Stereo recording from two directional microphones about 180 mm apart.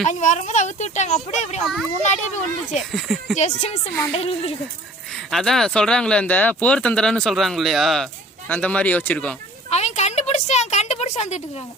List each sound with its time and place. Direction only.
0.0 s speech: 45° left (ahead or behind)
1.6 s speech: centre (ahead or behind)
2.0 s speech: 40° left (ahead or behind)
2.9 s speech: centre (ahead or behind)
3.3 s speech: 40° left (ahead or behind)
5.3 s speech: centre (ahead or behind)
9.6 s a sound: 40° left (ahead or behind)